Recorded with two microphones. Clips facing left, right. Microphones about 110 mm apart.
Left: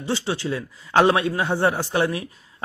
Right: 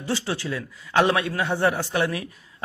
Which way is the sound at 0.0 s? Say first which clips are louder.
Left 2 dB; 25° left (ahead or behind).